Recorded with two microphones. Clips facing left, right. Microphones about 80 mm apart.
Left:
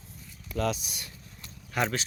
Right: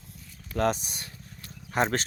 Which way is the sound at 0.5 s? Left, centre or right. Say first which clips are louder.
Right 4 dB; right.